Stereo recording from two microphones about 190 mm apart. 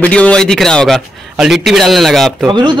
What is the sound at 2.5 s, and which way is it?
Speech, 25° right (ahead or behind).